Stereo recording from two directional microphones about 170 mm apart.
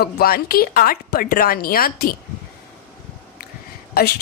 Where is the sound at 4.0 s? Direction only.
65° left (ahead or behind).